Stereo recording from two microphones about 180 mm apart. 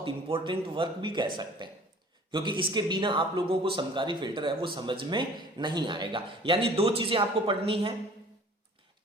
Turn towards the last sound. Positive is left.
turn(degrees=-30)  # may be behind; listen again after turning